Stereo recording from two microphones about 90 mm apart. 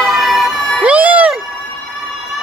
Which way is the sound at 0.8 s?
15° right (ahead or behind).